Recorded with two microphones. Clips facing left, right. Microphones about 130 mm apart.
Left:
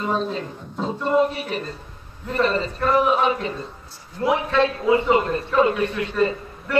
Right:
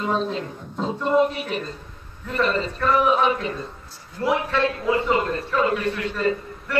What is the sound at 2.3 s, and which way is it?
Speech, 35° left (ahead or behind).